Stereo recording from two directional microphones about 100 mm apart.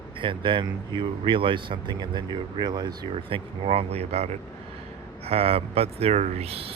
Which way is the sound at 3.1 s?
75° right (ahead or behind).